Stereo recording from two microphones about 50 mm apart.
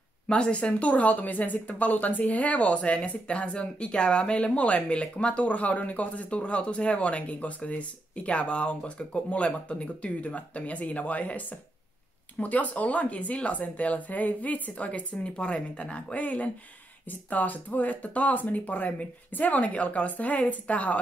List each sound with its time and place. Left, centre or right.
0.3 s a woman's voice: left